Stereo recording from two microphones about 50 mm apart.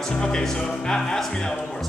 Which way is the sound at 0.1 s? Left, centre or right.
Centre.